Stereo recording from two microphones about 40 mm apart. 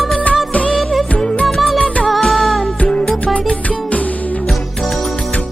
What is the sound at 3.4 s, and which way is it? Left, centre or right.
Music, left.